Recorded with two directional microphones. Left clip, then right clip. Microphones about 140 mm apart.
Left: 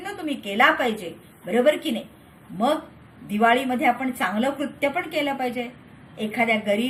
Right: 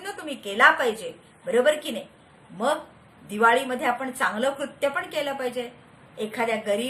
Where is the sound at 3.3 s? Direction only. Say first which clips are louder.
Left 1 dB; 15° right (ahead or behind).